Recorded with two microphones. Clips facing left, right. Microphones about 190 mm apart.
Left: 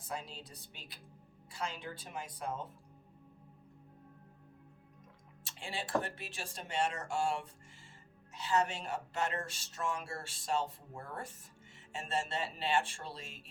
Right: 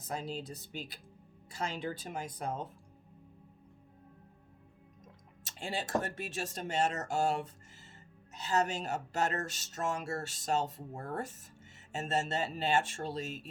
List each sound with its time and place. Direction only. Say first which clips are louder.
0.0 s speech: right 5 dB; 40° right (ahead or behind)
5.4 s speech: right 4 dB; 40° right (ahead or behind)